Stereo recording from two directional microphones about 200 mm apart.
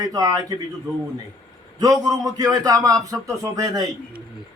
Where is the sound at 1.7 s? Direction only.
20° right (ahead or behind).